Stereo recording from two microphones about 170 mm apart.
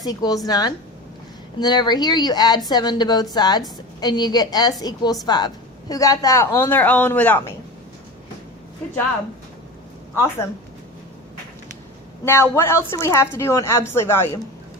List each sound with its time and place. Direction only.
0.0 s a woman's voice: 20° left (ahead or behind)
12.2 s a woman's voice: 15° left (ahead or behind)